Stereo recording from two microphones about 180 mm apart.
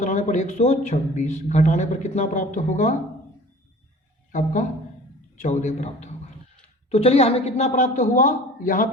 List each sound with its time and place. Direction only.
0.0 s a man's voice: 40° left (ahead or behind)
4.3 s a man's voice: 45° left (ahead or behind)